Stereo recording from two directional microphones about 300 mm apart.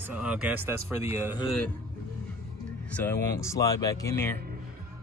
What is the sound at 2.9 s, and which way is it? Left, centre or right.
Speech, centre.